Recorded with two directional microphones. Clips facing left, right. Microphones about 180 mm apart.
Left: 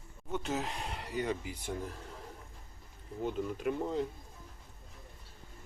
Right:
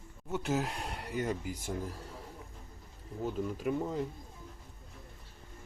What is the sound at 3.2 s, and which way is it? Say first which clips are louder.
Speech: even; centre (ahead or behind).